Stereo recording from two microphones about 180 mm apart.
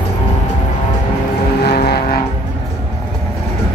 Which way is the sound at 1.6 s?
65° left (ahead or behind).